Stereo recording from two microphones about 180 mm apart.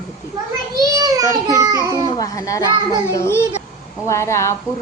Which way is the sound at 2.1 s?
20° left (ahead or behind).